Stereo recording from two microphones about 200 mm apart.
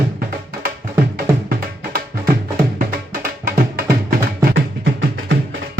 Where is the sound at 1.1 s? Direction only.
45° right (ahead or behind).